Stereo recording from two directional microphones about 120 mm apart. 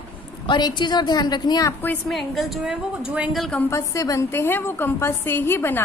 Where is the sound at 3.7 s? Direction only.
30° left (ahead or behind).